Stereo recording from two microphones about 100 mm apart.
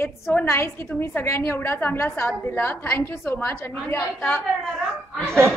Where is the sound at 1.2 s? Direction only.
25° left (ahead or behind).